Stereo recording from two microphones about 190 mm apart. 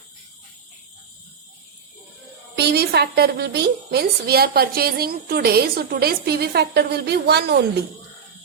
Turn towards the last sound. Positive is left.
turn(degrees=-60)  # may be behind; listen again after turning